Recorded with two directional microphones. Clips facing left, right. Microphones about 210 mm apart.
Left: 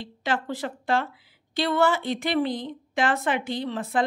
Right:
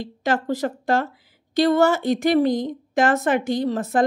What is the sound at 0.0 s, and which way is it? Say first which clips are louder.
Speech: right 5 dB; 45° right (ahead or behind).